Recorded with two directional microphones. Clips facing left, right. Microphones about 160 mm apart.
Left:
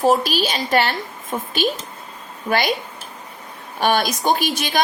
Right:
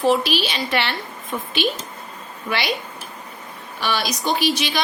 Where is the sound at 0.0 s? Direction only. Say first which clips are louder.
Left 1 dB; 45° left (ahead or behind).